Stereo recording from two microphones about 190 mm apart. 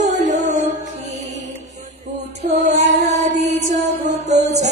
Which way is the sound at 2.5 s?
35° right (ahead or behind).